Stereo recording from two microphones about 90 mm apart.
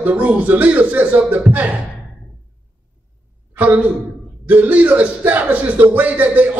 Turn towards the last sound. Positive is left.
turn(degrees=-20)  # may be behind; listen again after turning